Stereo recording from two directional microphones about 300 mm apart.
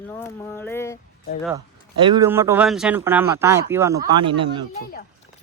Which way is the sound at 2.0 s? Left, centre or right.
Centre.